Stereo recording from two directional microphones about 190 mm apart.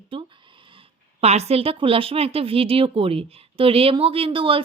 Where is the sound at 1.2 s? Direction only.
35° right (ahead or behind).